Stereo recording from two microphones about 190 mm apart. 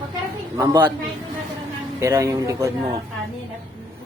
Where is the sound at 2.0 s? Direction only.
15° right (ahead or behind).